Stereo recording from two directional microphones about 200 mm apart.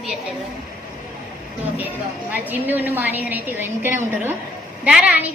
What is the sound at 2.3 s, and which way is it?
A woman's voice, 10° right (ahead or behind).